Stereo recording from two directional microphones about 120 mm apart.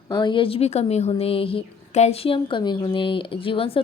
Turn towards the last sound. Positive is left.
turn(degrees=50)  # may be behind; listen again after turning